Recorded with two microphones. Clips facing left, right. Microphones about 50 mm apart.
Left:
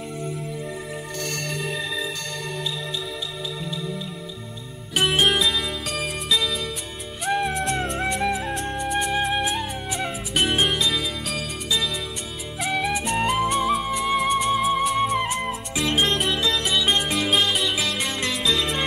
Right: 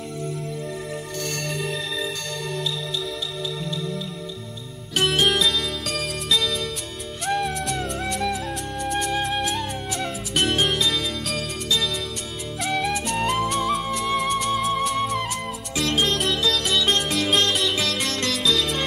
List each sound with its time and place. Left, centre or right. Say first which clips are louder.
1.2 s music: even; centre
5.1 s music: left 1 dB; centre
5.4 s music: even; centre
7.6 s flute: left 2 dB; left
8.0 s music: left 2 dB; left
8.5 s music: left 2 dB; left
8.8 s music: even; centre
12.5 s flute: even; centre
16.5 s music: even; centre